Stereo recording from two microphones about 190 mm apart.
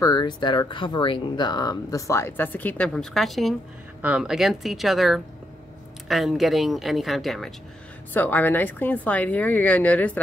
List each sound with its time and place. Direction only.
0.0 s a woman's voice: 20° left (ahead or behind)